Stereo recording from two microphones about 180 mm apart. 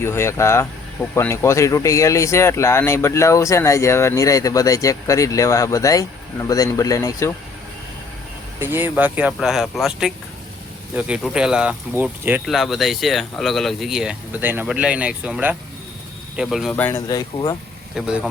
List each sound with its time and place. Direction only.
0.0 s speech: 15° left (ahead or behind)
8.6 s speech: 10° right (ahead or behind)
12.5 s speech: centre (ahead or behind)
16.7 s speech: 10° left (ahead or behind)
17.1 s speech: 20° left (ahead or behind)
17.9 s speech: 5° right (ahead or behind)